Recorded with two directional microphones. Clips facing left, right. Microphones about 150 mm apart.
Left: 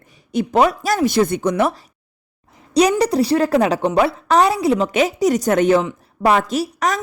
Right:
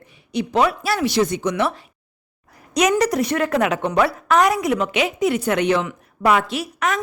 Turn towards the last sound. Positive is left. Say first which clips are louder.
# left 3 dB
turn(degrees=35)  # may be behind; listen again after turning